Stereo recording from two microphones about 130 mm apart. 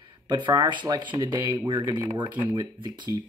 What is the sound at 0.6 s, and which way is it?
Speech, 35° right (ahead or behind).